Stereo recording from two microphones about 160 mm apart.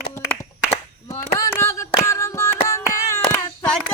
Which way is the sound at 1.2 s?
15° left (ahead or behind).